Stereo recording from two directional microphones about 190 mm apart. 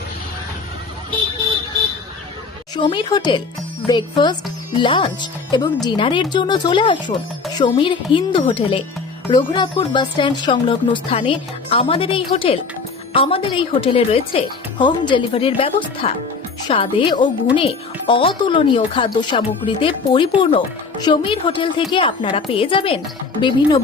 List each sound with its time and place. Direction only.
2.7 s speech: 25° left (ahead or behind)